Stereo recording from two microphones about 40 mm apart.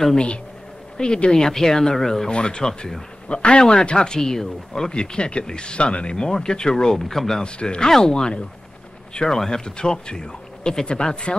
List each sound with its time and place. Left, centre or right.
0.9 s speech: left
2.3 s speech: left
2.6 s speech: centre
3.3 s speech: left
4.2 s speech: centre
7.4 s speech: left